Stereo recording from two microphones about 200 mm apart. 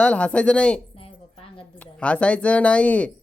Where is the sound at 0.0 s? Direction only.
5° left (ahead or behind).